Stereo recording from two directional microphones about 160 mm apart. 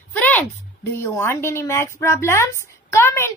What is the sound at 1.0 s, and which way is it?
A woman's voice, 15° left (ahead or behind).